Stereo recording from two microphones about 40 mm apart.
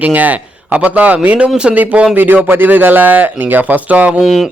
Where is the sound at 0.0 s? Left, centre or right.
Right.